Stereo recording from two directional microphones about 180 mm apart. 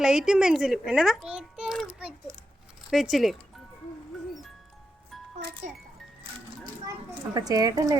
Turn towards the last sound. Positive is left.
turn(degrees=-20)  # may be behind; listen again after turning